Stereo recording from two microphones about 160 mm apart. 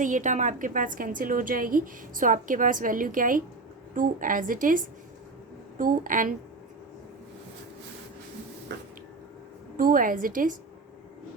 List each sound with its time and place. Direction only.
0.0 s a woman's voice: 50° right (ahead or behind)
9.7 s a woman's voice: 60° right (ahead or behind)